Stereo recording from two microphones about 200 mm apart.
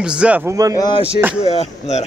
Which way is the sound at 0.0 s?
5° right (ahead or behind).